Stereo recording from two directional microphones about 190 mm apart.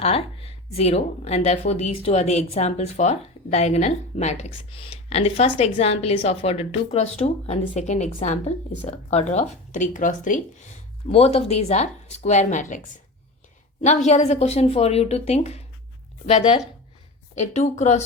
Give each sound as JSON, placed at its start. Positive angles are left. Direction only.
{"t": 0.0, "sound": "speech", "side_deg": 30}
{"t": 13.8, "sound": "speech", "side_deg": 40}